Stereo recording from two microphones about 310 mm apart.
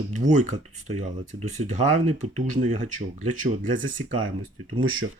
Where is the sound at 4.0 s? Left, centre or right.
Right.